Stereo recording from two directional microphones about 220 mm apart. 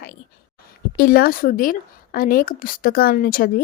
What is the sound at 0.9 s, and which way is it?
Speech, 40° left (ahead or behind).